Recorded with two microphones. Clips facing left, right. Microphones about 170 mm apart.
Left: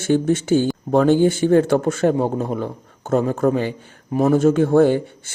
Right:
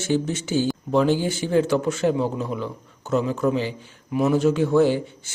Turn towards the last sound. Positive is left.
turn(degrees=55)  # may be behind; listen again after turning